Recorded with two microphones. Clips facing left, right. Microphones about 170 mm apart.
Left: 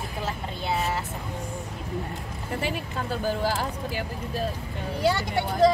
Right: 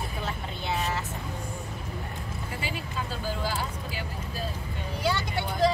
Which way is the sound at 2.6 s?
60° left (ahead or behind).